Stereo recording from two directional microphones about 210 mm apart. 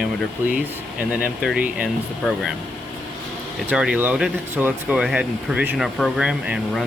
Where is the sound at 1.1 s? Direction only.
5° right (ahead or behind).